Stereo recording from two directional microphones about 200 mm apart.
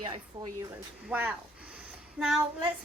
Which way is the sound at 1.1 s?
10° right (ahead or behind).